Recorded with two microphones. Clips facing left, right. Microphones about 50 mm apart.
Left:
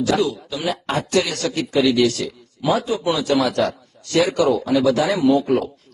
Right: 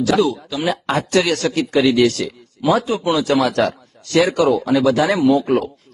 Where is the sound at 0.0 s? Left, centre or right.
Right.